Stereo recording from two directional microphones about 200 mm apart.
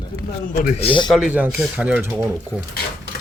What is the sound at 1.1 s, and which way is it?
Speech, 5° right (ahead or behind).